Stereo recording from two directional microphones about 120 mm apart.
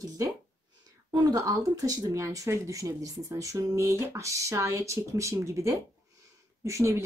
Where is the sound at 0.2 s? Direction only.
25° right (ahead or behind).